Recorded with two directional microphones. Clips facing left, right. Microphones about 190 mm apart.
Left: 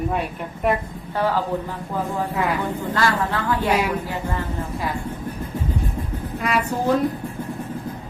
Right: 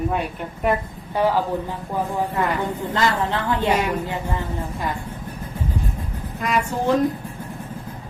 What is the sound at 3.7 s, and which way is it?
Speech, 5° left (ahead or behind).